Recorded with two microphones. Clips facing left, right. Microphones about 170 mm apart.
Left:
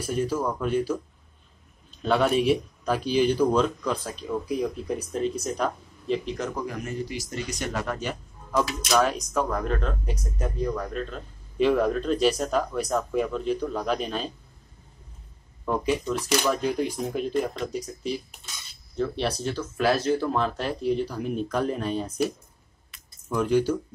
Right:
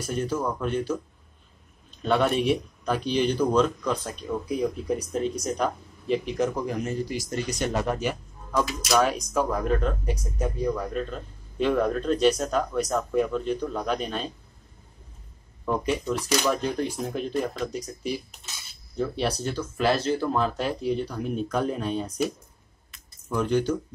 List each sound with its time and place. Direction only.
0.1 s speech: 5° left (ahead or behind)
2.0 s speech: centre (ahead or behind)
7.1 s speech: 40° right (ahead or behind)
7.6 s speech: 25° right (ahead or behind)
7.9 s a man's voice: 10° right (ahead or behind)
15.6 s speech: centre (ahead or behind)
18.9 s speech: centre (ahead or behind)
23.3 s speech: 5° left (ahead or behind)